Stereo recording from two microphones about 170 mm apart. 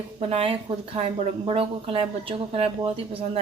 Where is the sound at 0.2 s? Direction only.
35° right (ahead or behind).